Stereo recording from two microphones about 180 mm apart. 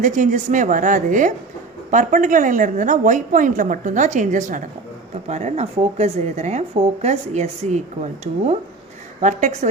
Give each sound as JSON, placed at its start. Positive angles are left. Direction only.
{"t": 0.0, "sound": "a woman's voice", "side_deg": -45}